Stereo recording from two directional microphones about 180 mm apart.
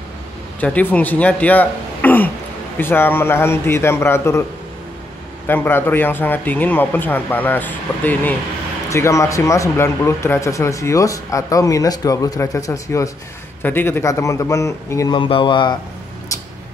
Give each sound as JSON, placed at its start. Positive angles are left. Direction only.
{"t": 0.6, "sound": "speech", "side_deg": 10}
{"t": 5.5, "sound": "speech", "side_deg": 10}